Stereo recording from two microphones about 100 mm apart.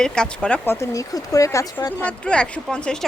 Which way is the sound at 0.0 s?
10° left (ahead or behind).